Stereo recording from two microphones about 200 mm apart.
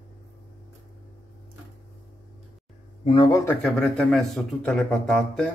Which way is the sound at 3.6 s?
5° left (ahead or behind).